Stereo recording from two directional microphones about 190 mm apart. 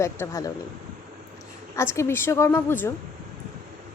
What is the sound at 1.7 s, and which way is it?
A woman's voice, 15° left (ahead or behind).